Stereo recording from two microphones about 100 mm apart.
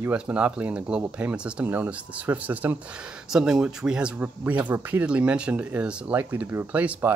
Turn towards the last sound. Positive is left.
turn(degrees=-15)  # may be behind; listen again after turning